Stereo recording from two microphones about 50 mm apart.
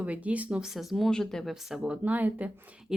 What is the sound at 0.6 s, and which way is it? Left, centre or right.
Speech, centre.